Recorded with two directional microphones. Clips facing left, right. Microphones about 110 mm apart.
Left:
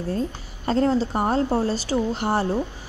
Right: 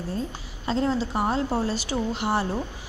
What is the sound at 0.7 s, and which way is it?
A woman's voice, 45° left (ahead or behind).